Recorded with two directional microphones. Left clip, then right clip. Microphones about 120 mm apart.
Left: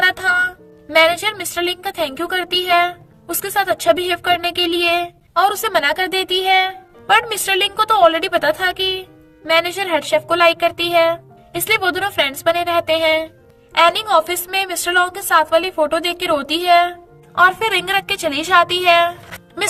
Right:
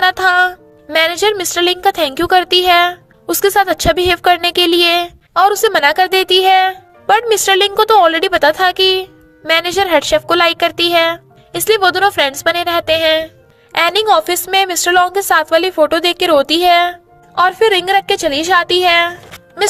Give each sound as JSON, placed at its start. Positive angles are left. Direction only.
{"t": 0.0, "sound": "music", "side_deg": -65}
{"t": 0.9, "sound": "a woman's voice", "side_deg": -65}
{"t": 13.7, "sound": "a woman's voice", "side_deg": -75}
{"t": 17.3, "sound": "a woman's voice", "side_deg": -50}